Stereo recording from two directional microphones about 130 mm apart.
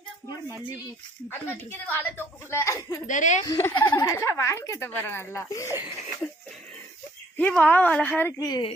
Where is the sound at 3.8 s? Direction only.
30° left (ahead or behind).